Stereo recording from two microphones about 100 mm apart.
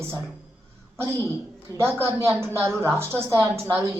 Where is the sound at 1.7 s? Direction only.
25° right (ahead or behind).